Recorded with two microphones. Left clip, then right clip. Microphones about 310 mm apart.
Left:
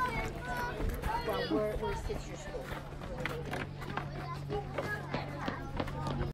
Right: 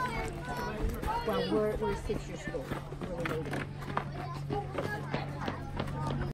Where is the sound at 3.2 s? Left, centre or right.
Centre.